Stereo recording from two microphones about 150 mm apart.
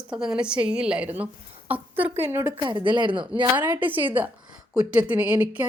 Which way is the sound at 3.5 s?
10° right (ahead or behind).